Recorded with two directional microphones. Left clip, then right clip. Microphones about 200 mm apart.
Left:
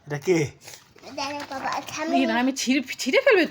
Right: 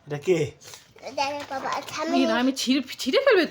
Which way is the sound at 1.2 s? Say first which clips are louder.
Right 3 dB; 20° right (ahead or behind).